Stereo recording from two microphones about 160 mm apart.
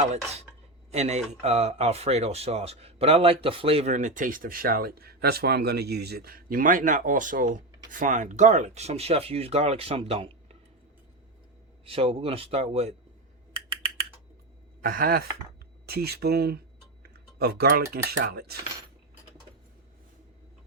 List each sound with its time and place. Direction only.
0.9 s speech: 45° right (ahead or behind)
11.9 s speech: 35° right (ahead or behind)
14.8 s speech: 65° right (ahead or behind)
15.9 s speech: 80° right
17.0 s typing: 75° right (ahead or behind)
17.9 s speech: 75° right (ahead or behind)